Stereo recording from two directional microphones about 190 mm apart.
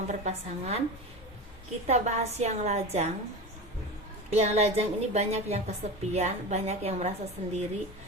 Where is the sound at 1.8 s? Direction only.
35° right (ahead or behind).